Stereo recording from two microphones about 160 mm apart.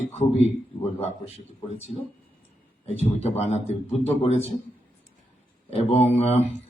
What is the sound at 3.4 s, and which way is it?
A man's voice, 40° left (ahead or behind).